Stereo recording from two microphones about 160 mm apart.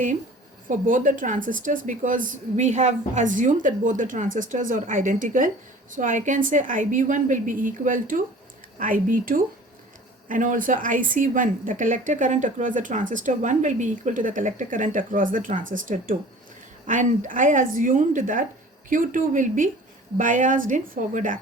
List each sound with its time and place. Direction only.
0.7 s a woman's voice: 55° right (ahead or behind)